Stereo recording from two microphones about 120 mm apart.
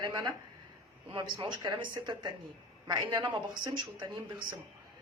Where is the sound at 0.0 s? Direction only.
35° right (ahead or behind).